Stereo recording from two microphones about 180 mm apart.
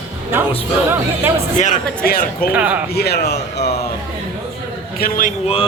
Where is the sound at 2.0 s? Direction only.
55° left (ahead or behind).